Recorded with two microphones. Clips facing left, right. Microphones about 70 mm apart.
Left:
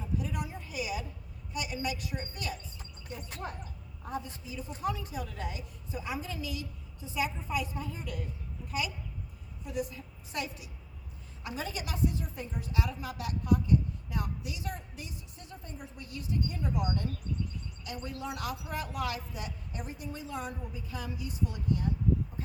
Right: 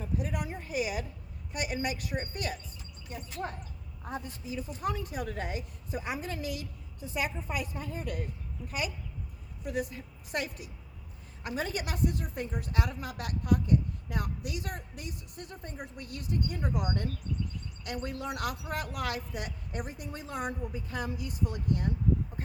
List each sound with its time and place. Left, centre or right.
0.2 s a sound: right
1.5 s a woman's voice: right
4.1 s a woman's voice: right